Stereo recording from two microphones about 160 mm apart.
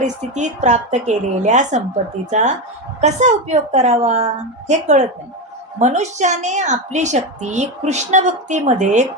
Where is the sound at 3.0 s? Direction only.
45° right (ahead or behind).